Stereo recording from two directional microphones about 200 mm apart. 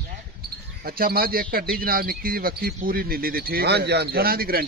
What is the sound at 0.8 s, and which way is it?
Speech, 50° right (ahead or behind).